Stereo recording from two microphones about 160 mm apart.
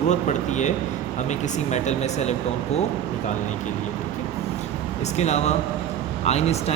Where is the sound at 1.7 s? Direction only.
45° left (ahead or behind).